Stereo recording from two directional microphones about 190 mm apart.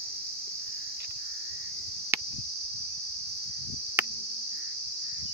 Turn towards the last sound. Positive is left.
turn(degrees=-10)  # may be behind; listen again after turning